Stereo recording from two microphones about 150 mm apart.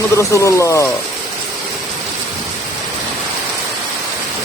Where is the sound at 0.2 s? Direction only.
20° left (ahead or behind).